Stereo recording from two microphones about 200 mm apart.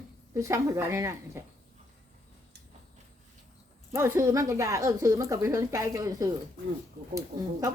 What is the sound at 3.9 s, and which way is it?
Speech, 10° right (ahead or behind).